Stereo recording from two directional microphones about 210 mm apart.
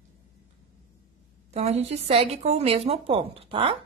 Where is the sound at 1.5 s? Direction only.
30° right (ahead or behind).